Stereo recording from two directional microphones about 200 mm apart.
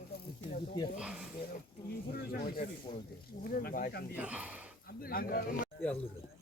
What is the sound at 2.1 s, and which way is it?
Speech, 50° left (ahead or behind).